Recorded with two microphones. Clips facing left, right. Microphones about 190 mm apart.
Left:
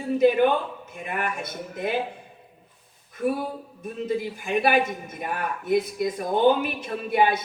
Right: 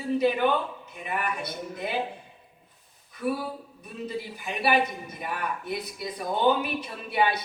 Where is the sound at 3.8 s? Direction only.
50° left (ahead or behind).